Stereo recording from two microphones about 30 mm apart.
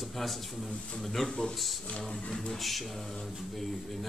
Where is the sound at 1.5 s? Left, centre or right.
Centre.